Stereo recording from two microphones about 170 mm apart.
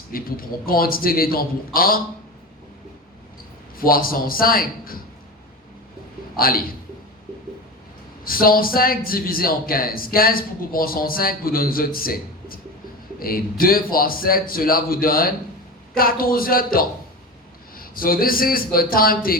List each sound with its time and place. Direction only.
0.1 s a man's voice: 60° left (ahead or behind)
3.8 s a man's voice: 60° left (ahead or behind)
6.3 s a man's voice: 60° left (ahead or behind)
8.2 s a man's voice: 60° left (ahead or behind)